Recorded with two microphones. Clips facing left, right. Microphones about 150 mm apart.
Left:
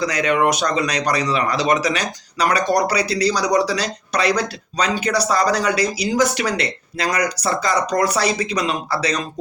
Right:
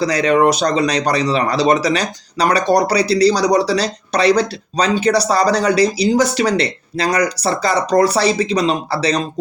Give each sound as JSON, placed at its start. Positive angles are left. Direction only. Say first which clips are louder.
{"t": 0.0, "sound": "speech", "louder": "right 5 dB", "side_deg": -35}